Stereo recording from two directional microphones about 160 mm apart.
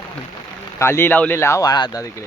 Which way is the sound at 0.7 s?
15° left (ahead or behind).